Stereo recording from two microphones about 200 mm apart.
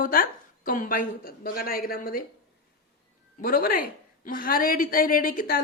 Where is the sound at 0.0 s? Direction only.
45° left (ahead or behind).